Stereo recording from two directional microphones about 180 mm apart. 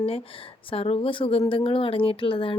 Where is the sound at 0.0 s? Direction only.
30° left (ahead or behind).